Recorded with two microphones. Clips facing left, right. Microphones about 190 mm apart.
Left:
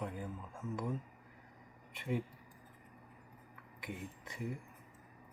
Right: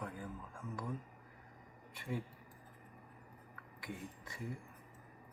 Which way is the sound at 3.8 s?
20° left (ahead or behind).